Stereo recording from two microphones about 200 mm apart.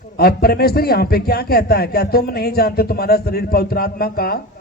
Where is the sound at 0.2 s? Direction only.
50° left (ahead or behind).